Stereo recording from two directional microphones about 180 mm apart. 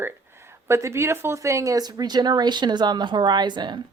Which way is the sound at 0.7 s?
15° right (ahead or behind).